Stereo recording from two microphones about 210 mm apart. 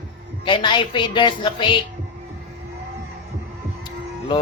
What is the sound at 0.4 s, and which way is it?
A woman's voice, 25° left (ahead or behind).